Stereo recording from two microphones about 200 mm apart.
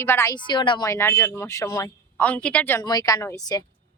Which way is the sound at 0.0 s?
10° left (ahead or behind).